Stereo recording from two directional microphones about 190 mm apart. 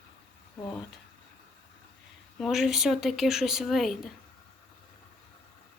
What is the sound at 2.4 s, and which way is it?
Humming, centre (ahead or behind).